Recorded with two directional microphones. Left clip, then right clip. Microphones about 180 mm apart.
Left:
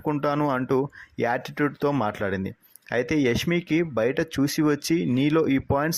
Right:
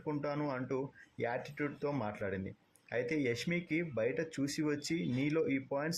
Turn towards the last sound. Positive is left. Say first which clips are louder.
# left 12 dB
turn(degrees=40)  # may be behind; listen again after turning